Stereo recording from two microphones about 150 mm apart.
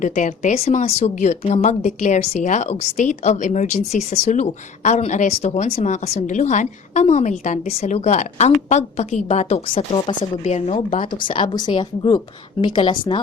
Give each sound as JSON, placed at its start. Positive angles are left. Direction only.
{"t": 0.0, "sound": "a woman's voice", "side_deg": 55}
{"t": 11.1, "sound": "speech", "side_deg": 35}